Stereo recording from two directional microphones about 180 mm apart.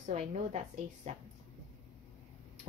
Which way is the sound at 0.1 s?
35° right (ahead or behind).